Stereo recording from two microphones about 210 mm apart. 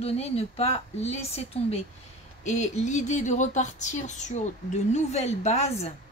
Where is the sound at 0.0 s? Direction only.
30° left (ahead or behind).